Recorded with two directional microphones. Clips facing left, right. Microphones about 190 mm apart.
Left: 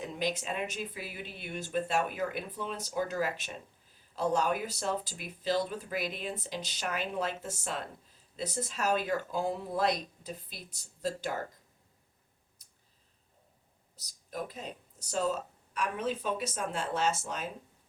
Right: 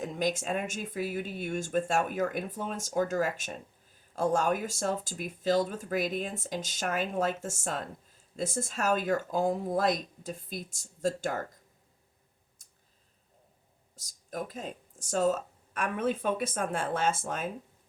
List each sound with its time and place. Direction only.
0.0 s speech: 45° right (ahead or behind)
12.6 s clicking: 45° right (ahead or behind)
13.9 s speech: 45° right (ahead or behind)